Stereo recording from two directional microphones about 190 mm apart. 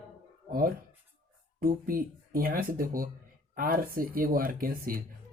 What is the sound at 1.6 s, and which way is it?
Speech, 50° right (ahead or behind).